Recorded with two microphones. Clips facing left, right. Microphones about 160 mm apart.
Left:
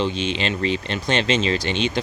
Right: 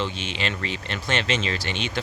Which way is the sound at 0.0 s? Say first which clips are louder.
Left 6 dB; 20° left (ahead or behind).